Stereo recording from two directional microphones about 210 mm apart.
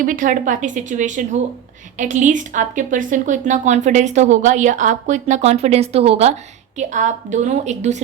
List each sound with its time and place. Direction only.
0.0 s a woman's voice: 40° right (ahead or behind)